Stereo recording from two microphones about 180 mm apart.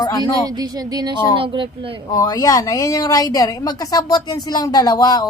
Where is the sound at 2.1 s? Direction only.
20° left (ahead or behind).